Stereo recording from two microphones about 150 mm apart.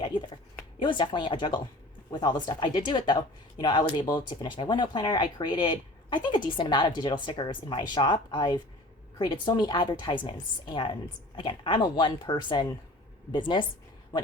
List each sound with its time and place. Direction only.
0.8 s speech: 30° left (ahead or behind)